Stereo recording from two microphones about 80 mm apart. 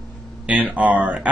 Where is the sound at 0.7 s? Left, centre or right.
Centre.